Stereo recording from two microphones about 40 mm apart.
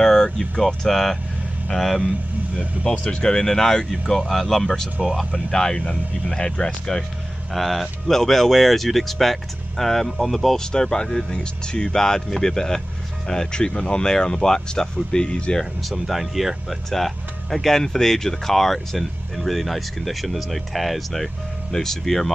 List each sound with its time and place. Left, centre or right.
0.0 s speech: centre
2.8 s speech: left; by 4.6 s centre
5.0 s speech: centre
5.3 s speech: centre
7.5 s speech: centre
10.6 s speech: centre
15.8 s speech: centre